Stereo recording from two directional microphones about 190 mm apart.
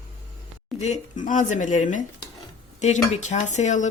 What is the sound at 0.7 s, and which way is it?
A woman's voice, 35° left (ahead or behind).